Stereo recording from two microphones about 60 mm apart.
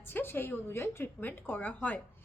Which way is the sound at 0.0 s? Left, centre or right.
Left.